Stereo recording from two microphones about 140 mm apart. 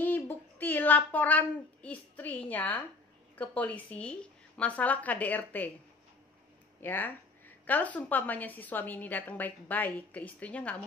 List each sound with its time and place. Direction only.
0.0 s a child's voice: 15° left (ahead or behind)
6.8 s a woman's voice: 15° left (ahead or behind)